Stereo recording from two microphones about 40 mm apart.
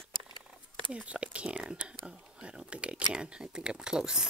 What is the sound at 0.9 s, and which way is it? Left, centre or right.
Speech, right.